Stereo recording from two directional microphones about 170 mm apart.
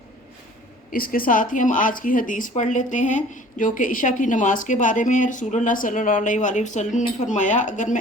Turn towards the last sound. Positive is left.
turn(degrees=45)  # may be behind; listen again after turning